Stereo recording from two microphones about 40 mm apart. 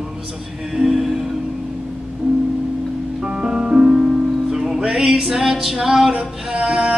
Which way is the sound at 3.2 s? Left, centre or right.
Right.